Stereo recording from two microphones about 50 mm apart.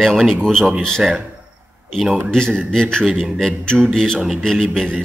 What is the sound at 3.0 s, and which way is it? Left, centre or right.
A man's voice, centre.